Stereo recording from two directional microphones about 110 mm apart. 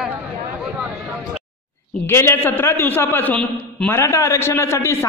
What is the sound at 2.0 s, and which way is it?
A man's voice, 20° left (ahead or behind).